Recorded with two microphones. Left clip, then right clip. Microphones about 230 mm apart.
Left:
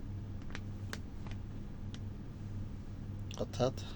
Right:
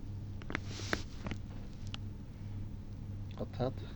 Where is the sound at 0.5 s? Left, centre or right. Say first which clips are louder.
Right 10 dB; right.